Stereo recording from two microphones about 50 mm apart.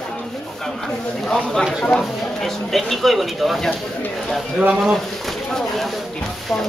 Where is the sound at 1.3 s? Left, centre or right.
Centre.